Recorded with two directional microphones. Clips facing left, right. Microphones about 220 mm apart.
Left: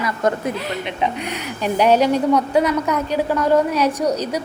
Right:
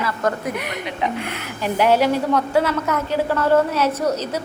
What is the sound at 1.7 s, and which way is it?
A woman's voice, 20° left (ahead or behind).